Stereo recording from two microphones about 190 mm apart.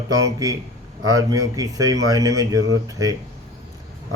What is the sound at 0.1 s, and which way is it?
Speech, 20° right (ahead or behind).